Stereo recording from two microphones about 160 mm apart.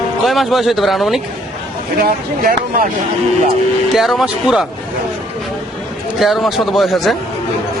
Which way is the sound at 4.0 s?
Centre (ahead or behind).